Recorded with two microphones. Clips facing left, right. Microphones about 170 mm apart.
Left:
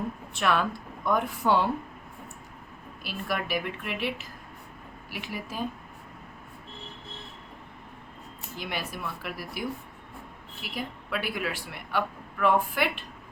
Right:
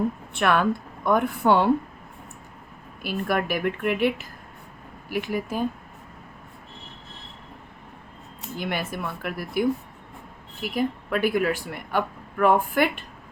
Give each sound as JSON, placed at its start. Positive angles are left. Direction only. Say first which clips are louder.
{"t": 0.3, "sound": "speech", "louder": "right 4 dB", "side_deg": -55}
{"t": 3.0, "sound": "a woman's voice", "louder": "right 7 dB", "side_deg": -50}
{"t": 8.5, "sound": "a woman's voice", "louder": "right 6 dB", "side_deg": -55}